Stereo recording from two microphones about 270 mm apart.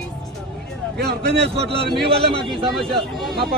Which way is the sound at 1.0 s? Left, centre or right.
Right.